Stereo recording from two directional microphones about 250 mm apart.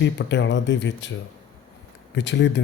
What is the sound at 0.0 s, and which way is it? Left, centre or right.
Mantra, left.